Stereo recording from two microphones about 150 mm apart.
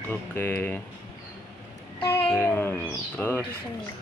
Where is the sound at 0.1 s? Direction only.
10° left (ahead or behind).